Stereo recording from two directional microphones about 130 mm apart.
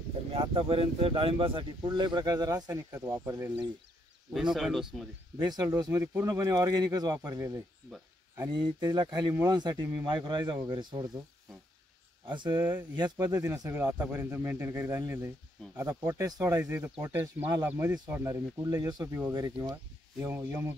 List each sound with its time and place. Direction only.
0.3 s speech: 45° right (ahead or behind); by 3.5 s 20° right (ahead or behind)
4.3 s speech: centre (ahead or behind)
5.4 s speech: 30° right (ahead or behind)
12.3 s speech: 35° right (ahead or behind)
19.7 s speech: 20° right (ahead or behind)